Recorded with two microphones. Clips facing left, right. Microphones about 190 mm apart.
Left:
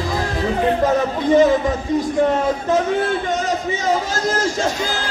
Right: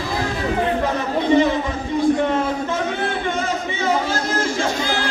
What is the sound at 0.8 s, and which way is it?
Speech, 45° left (ahead or behind).